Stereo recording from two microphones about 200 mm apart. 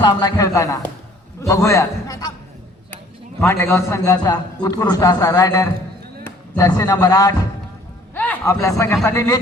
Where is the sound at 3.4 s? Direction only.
10° left (ahead or behind).